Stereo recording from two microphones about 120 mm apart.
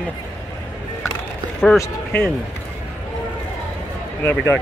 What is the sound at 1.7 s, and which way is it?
Speech, 20° left (ahead or behind).